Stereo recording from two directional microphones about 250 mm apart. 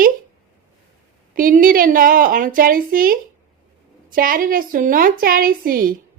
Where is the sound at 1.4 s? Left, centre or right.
Right.